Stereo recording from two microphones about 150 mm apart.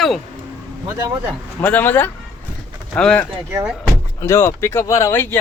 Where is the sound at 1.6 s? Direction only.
10° left (ahead or behind).